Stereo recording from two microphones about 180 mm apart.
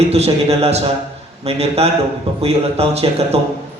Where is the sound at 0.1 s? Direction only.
35° right (ahead or behind).